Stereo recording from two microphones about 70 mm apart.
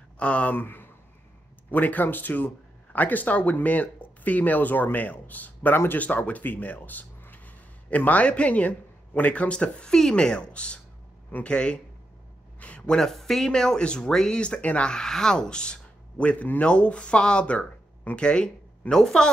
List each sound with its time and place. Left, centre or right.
0.2 s speech: centre